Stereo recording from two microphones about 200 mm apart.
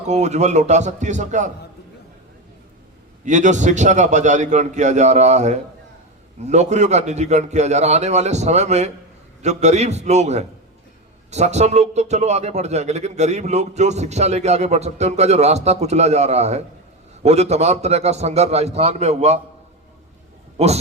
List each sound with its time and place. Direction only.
0.1 s a man's voice: 35° right (ahead or behind)
3.2 s a man's voice: 40° right (ahead or behind)